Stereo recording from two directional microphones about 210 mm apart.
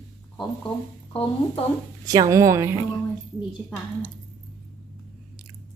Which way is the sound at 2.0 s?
15° right (ahead or behind).